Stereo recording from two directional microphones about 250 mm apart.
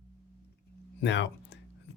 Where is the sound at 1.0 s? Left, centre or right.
Left.